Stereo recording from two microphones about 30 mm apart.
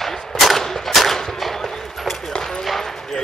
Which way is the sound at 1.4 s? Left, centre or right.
Centre.